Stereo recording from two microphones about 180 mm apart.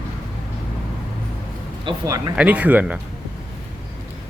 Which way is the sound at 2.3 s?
5° right (ahead or behind).